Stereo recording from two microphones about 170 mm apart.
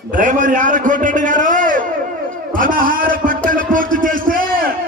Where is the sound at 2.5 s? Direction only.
55° right (ahead or behind).